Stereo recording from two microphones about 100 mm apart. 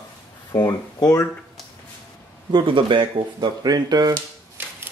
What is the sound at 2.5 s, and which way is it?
Speech, 60° right (ahead or behind).